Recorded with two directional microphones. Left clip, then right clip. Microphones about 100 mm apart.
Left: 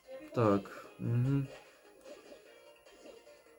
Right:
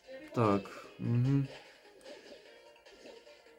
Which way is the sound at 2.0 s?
30° left (ahead or behind).